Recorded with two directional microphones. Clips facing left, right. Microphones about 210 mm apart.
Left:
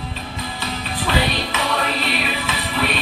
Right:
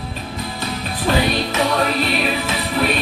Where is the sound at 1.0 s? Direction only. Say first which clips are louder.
Right 4 dB; 45° right (ahead or behind).